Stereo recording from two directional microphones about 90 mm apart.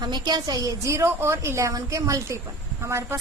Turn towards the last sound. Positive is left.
turn(degrees=-30)  # may be behind; listen again after turning